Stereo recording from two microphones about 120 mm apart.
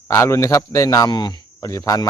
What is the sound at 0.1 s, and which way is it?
Speech, 25° left (ahead or behind).